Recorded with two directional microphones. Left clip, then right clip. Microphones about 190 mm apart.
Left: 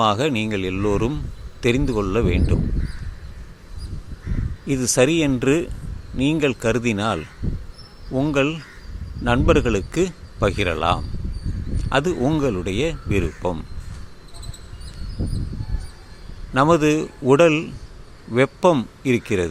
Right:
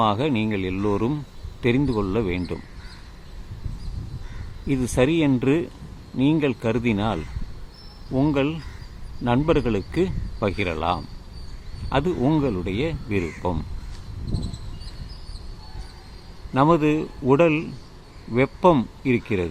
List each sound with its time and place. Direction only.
0.0 s a man's voice: 15° left (ahead or behind)
4.6 s a man's voice: 15° left (ahead or behind)
16.6 s a man's voice: 15° left (ahead or behind)